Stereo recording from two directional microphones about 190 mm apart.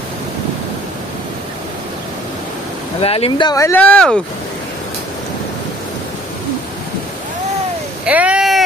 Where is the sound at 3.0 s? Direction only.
30° left (ahead or behind); by 4.2 s 5° left (ahead or behind).